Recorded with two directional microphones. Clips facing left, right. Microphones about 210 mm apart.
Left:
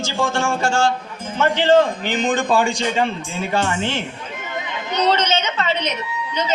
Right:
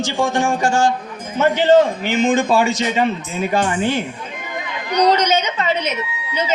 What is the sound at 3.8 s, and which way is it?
Speech, 10° right (ahead or behind).